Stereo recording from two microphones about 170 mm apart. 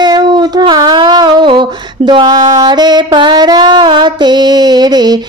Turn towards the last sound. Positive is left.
turn(degrees=-25)  # may be behind; listen again after turning